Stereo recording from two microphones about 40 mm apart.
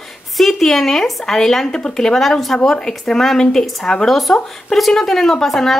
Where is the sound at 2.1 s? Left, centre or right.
Centre.